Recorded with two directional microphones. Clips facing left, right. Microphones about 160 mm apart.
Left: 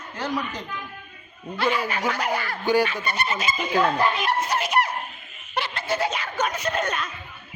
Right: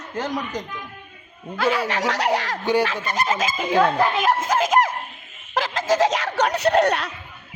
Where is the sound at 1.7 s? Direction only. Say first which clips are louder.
Right 3 dB; 90° right.